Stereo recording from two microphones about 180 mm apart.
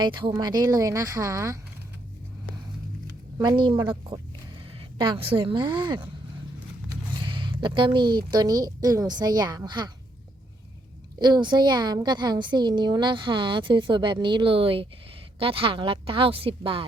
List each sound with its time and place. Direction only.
0.0 s a woman's voice: 25° right (ahead or behind)
3.3 s a woman's voice: 25° right (ahead or behind)
7.2 s a woman's voice: 25° right (ahead or behind)
11.2 s a woman's voice: 25° right (ahead or behind)